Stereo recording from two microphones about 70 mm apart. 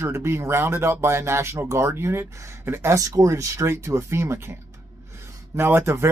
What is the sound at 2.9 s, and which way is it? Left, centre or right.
Speech, right.